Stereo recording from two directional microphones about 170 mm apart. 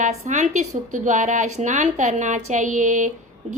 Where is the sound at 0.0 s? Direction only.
45° right (ahead or behind).